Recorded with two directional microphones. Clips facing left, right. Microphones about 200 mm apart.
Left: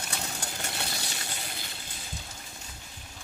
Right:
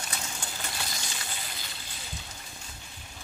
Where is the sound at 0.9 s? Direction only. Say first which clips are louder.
Left 2 dB; 35° left (ahead or behind).